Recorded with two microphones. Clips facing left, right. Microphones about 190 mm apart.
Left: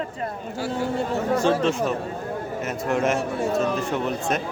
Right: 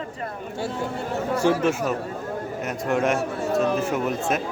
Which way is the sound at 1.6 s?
5° right (ahead or behind).